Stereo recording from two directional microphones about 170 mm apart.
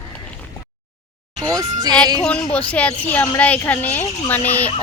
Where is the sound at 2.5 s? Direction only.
10° left (ahead or behind).